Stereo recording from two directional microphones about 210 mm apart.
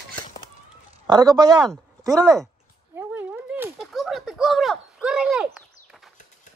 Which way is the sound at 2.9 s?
10° right (ahead or behind).